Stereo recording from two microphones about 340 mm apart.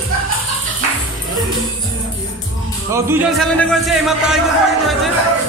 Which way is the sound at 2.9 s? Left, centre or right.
Centre.